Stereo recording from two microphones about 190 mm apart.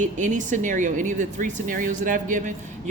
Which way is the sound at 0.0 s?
40° right (ahead or behind).